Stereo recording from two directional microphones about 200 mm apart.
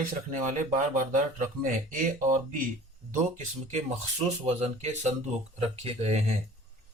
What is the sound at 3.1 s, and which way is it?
Speech, 35° right (ahead or behind).